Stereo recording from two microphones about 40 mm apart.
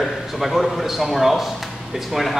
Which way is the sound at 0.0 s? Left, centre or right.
Centre.